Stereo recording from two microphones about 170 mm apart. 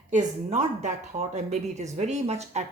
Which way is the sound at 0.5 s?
45° right (ahead or behind).